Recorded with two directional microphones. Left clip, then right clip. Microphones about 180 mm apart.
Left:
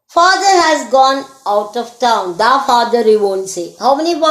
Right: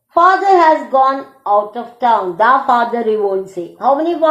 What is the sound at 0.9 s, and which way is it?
Speech, 45° left (ahead or behind).